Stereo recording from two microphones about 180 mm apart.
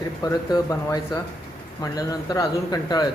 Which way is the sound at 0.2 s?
20° left (ahead or behind).